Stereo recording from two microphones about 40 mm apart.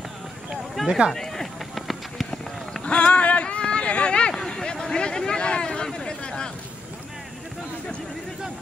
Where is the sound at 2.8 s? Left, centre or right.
Left.